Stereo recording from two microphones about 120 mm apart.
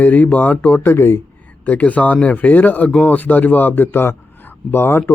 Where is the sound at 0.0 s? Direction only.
15° left (ahead or behind).